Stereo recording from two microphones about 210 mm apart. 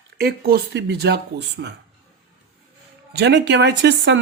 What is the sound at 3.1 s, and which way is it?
Speech, 55° right (ahead or behind).